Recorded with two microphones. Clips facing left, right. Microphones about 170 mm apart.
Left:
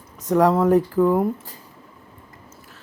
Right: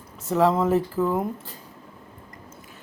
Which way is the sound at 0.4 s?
10° left (ahead or behind).